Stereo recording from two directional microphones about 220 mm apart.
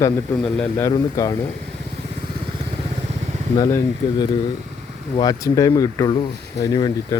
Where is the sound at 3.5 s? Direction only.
15° left (ahead or behind).